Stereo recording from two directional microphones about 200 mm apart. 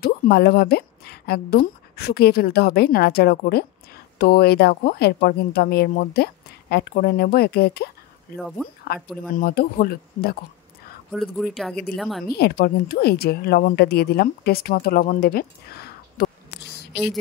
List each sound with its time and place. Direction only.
0.0 s a woman's voice: 50° left (ahead or behind)
8.4 s speech: centre (ahead or behind)
8.9 s a woman's voice: 50° left (ahead or behind)
11.3 s speech: centre (ahead or behind)
12.4 s a woman's voice: 50° left (ahead or behind)